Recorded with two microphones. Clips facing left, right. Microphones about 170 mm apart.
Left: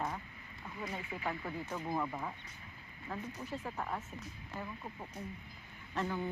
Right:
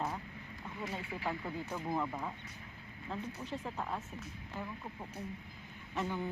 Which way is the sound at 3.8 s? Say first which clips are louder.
Even; 5° left (ahead or behind).